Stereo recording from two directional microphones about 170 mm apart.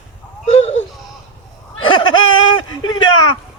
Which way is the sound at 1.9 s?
30° left (ahead or behind).